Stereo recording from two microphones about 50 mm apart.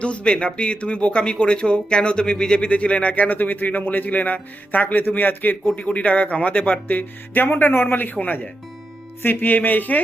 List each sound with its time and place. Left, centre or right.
0.0 s a man's voice: left
5.7 s a man's voice: left
8.0 s a man's voice: left
9.2 s a man's voice: left